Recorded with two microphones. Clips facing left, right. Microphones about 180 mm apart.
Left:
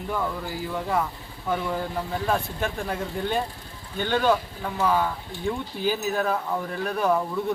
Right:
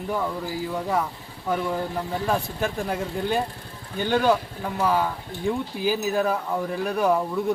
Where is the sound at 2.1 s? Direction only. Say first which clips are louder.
Right 1 dB; 5° right (ahead or behind).